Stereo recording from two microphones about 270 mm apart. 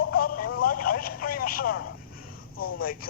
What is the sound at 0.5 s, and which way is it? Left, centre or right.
Telephone, left.